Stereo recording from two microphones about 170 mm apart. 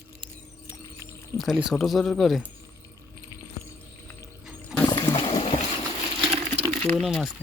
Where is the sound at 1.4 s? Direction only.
Centre (ahead or behind).